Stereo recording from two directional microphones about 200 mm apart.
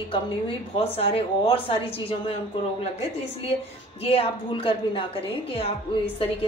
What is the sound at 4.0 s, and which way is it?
A woman's voice, 30° left (ahead or behind).